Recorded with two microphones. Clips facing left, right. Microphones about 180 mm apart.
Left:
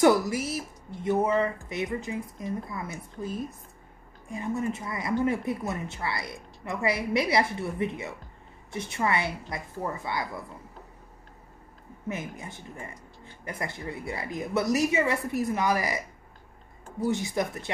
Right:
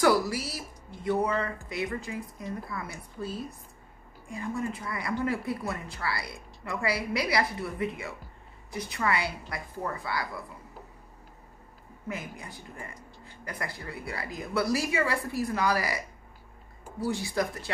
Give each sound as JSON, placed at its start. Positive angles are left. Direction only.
{"t": 0.0, "sound": "speech", "side_deg": 20}
{"t": 12.1, "sound": "speech", "side_deg": 25}
{"t": 17.0, "sound": "speech", "side_deg": 20}